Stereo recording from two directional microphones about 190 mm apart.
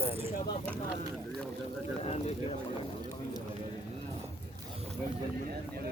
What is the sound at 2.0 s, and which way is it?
Speech, 35° left (ahead or behind).